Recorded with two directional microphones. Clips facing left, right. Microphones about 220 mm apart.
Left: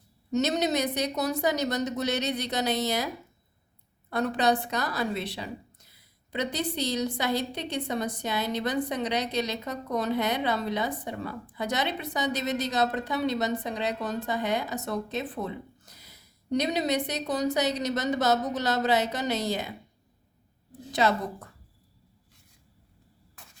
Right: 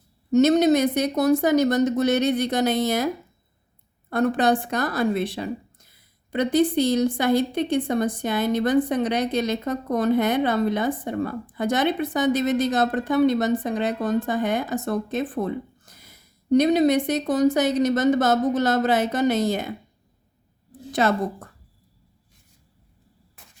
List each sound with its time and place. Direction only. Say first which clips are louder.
0.3 s speech: right 10 dB; 50° right (ahead or behind)
4.1 s speech: right 5 dB; 50° right (ahead or behind)
20.9 s speech: right 4 dB; 50° right (ahead or behind)